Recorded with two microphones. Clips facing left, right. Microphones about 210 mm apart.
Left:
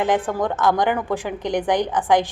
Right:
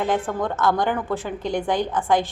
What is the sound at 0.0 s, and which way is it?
A woman's voice, 15° left (ahead or behind).